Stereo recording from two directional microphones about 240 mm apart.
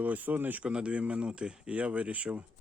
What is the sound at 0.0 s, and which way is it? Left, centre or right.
A man's voice, centre.